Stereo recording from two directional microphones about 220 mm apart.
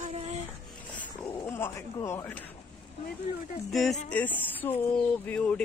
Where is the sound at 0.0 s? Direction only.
30° right (ahead or behind).